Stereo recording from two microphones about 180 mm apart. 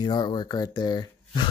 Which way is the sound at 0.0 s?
25° left (ahead or behind).